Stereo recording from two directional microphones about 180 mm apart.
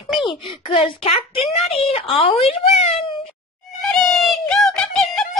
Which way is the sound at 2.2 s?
35° left (ahead or behind).